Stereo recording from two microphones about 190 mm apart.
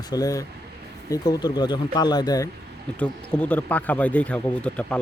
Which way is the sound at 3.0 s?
5° left (ahead or behind).